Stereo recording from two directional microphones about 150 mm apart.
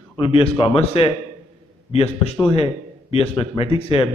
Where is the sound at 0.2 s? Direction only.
40° left (ahead or behind).